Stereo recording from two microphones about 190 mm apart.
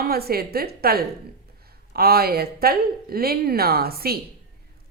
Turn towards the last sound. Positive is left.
turn(degrees=-55)  # may be behind; listen again after turning